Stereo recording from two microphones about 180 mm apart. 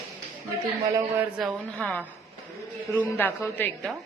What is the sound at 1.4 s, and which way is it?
A woman's voice, centre (ahead or behind).